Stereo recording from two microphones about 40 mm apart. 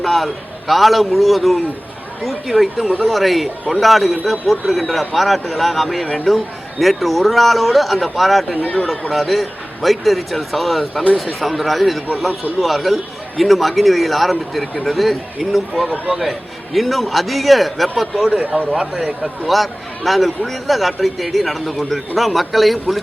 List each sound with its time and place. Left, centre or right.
0.0 s a man's voice: centre
8.6 s speech: left
8.9 s a man's voice: centre